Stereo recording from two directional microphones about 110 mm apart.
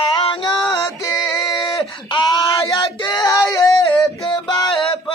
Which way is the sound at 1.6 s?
50° left (ahead or behind).